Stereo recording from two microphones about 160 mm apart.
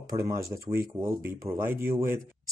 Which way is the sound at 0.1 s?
20° right (ahead or behind).